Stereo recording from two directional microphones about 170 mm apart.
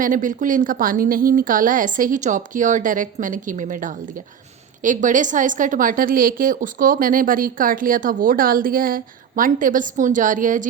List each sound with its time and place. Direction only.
0.0 s a woman's voice: 50° right (ahead or behind)